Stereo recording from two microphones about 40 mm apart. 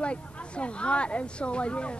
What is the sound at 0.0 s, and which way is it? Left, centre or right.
Speech, left.